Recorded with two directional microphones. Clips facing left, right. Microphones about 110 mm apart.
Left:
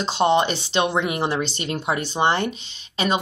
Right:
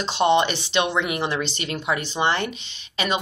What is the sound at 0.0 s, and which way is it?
Speech, 40° left (ahead or behind).